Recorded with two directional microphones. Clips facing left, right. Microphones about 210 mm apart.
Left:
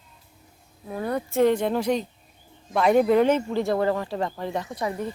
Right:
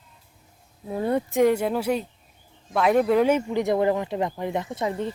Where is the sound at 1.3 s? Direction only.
10° right (ahead or behind).